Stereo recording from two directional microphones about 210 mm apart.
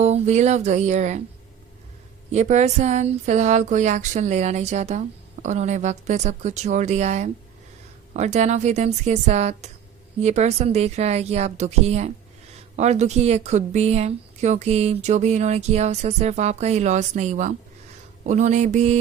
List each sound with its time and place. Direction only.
0.0 s a woman's voice: 30° right (ahead or behind)
2.3 s a woman's voice: 35° right (ahead or behind)